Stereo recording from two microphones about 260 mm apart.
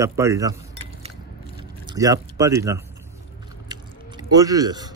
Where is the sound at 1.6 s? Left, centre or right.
Centre.